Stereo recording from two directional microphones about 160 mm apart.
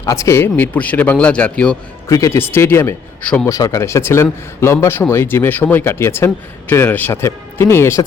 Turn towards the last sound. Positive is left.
turn(degrees=15)  # may be behind; listen again after turning